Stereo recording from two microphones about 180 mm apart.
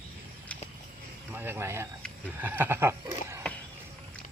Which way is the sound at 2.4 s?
10° right (ahead or behind).